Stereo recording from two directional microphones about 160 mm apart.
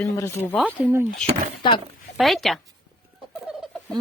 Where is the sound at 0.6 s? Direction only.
10° right (ahead or behind).